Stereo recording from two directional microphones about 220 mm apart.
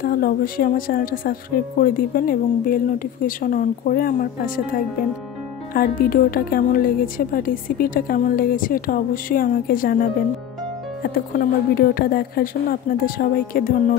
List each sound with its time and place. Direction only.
0.0 s speech: 40° left (ahead or behind)
5.7 s speech: 40° left (ahead or behind)